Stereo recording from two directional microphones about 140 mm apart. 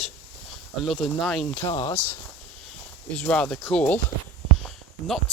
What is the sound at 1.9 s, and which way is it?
Speech, 10° left (ahead or behind).